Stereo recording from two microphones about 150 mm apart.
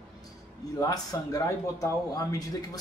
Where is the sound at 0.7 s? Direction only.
25° left (ahead or behind).